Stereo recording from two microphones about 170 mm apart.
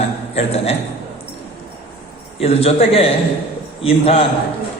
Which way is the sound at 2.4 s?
35° left (ahead or behind).